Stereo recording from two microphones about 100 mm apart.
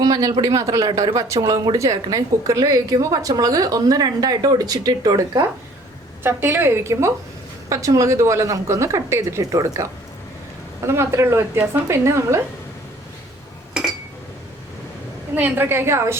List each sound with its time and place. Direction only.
0.0 s a woman's voice: 40° right (ahead or behind)
6.2 s a woman's voice: 20° right (ahead or behind)
15.4 s a woman's voice: 20° right (ahead or behind)